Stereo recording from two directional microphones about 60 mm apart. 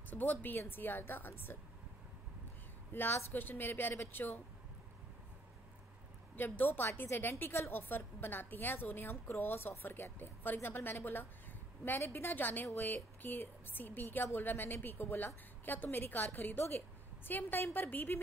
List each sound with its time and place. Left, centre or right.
0.1 s a woman's voice: left
2.9 s a woman's voice: left
6.3 s a woman's voice: left